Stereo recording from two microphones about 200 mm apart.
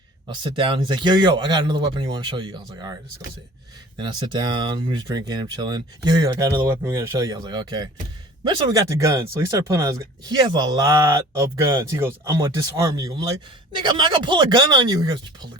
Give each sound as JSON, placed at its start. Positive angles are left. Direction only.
{"t": 0.4, "sound": "speech", "side_deg": -25}